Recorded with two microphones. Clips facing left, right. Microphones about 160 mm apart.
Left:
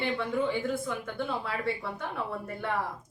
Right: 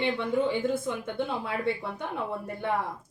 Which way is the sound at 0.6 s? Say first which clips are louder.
Right 3 dB; 20° right (ahead or behind).